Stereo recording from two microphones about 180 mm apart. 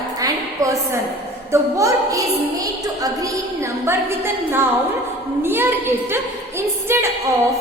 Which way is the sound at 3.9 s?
15° right (ahead or behind).